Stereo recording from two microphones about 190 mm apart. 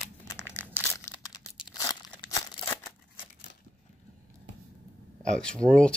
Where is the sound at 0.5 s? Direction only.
15° left (ahead or behind).